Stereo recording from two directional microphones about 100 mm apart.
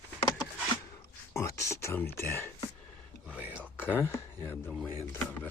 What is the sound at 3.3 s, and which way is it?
Whispering, 15° right (ahead or behind).